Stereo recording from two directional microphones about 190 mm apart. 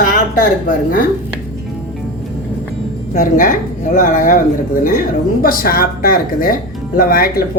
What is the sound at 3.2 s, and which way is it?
A woman's voice, 45° left (ahead or behind).